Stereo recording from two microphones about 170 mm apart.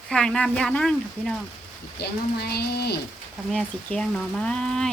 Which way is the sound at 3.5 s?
5° left (ahead or behind).